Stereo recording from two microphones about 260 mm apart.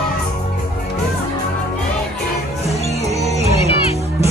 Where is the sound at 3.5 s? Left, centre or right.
Left.